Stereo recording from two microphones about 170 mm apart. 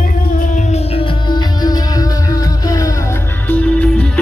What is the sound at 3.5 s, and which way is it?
Music, 5° left (ahead or behind).